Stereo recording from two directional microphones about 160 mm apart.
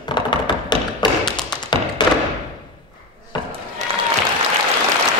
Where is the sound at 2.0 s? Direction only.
30° left (ahead or behind).